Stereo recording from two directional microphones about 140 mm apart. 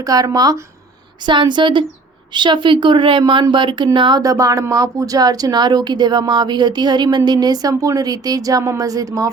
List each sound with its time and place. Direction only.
0.0 s speech: 25° right (ahead or behind)